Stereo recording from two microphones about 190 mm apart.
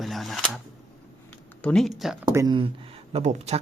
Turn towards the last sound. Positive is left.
turn(degrees=-35)  # may be behind; listen again after turning